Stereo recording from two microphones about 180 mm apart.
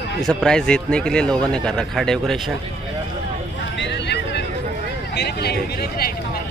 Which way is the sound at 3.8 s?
75° left (ahead or behind).